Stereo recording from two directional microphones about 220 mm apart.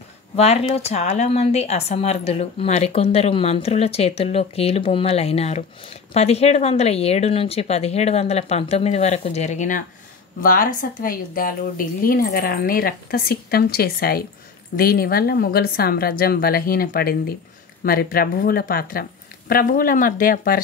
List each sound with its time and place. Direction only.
0.4 s a woman's voice: 30° left (ahead or behind)